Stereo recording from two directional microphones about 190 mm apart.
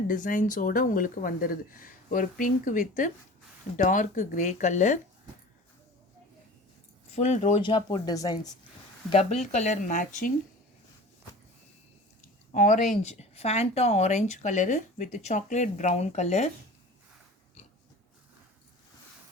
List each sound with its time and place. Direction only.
0.1 s speech: 45° left (ahead or behind)
7.1 s speech: 35° left (ahead or behind); by 8.5 s 20° left (ahead or behind)
9.0 s speech: 35° left (ahead or behind)
12.5 s speech: 40° left (ahead or behind)